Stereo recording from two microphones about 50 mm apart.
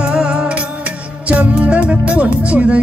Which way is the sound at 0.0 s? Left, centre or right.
Right.